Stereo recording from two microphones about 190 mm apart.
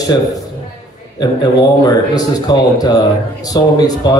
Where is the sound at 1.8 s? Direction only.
20° left (ahead or behind).